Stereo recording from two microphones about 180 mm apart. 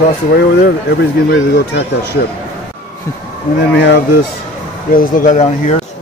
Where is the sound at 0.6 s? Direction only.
70° left (ahead or behind).